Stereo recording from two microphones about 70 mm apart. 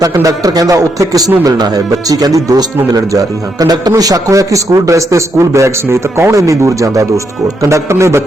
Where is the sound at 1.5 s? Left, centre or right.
Right.